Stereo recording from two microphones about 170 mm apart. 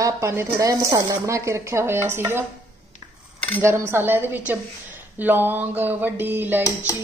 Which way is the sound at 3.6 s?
15° right (ahead or behind).